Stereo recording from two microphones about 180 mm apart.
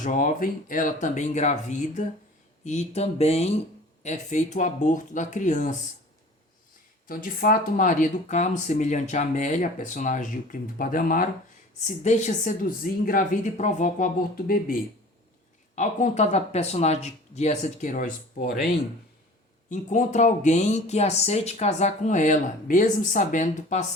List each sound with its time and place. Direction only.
0.0 s speech: 45° left (ahead or behind)
7.1 s speech: 50° left (ahead or behind)
15.7 s speech: 45° left (ahead or behind)
19.7 s speech: 40° left (ahead or behind)